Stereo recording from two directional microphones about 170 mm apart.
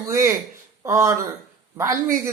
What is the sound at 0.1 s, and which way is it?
Speech, 15° right (ahead or behind).